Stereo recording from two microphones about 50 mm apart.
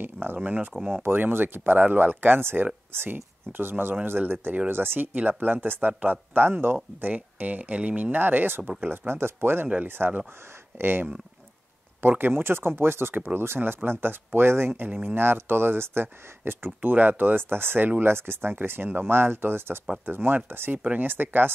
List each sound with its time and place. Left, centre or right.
0.0 s speech: right
0.4 s speech: right
1.0 s speech: right
7.2 s speech: right